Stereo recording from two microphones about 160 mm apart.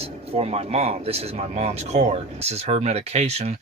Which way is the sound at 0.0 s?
40° right (ahead or behind).